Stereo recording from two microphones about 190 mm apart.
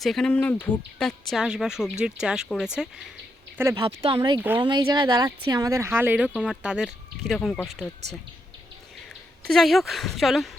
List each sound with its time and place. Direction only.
0.0 s speech: centre (ahead or behind)
3.6 s speech: 15° right (ahead or behind)
3.8 s speech: 25° right (ahead or behind); by 7.9 s centre (ahead or behind)
9.5 s speech: centre (ahead or behind)